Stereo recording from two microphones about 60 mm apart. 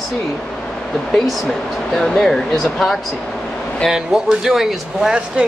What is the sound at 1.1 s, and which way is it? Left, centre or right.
Speech, centre.